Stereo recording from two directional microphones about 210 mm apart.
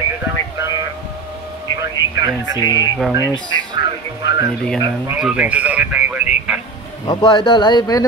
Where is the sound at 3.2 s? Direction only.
20° left (ahead or behind).